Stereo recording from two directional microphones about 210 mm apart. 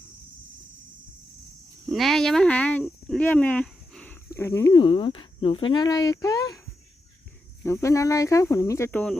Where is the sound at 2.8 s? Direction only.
5° left (ahead or behind).